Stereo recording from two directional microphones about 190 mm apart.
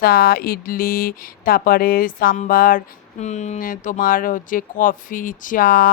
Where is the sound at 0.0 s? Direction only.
50° left (ahead or behind).